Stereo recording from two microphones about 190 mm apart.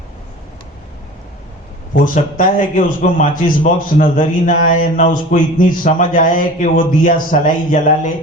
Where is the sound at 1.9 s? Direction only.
45° left (ahead or behind).